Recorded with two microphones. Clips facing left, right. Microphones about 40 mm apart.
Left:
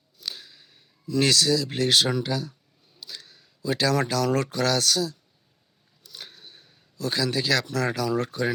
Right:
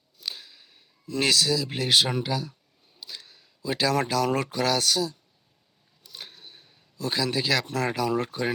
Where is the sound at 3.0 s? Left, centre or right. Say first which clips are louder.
Even; centre.